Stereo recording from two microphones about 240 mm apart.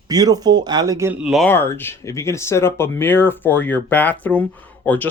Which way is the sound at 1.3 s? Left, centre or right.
Centre.